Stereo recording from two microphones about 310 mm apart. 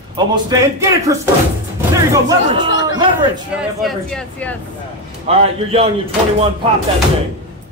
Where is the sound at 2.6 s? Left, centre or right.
Left.